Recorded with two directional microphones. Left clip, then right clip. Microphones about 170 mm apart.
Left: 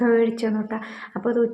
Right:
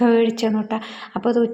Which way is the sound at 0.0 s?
20° right (ahead or behind).